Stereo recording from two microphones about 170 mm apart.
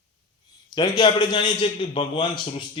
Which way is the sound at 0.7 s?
25° left (ahead or behind).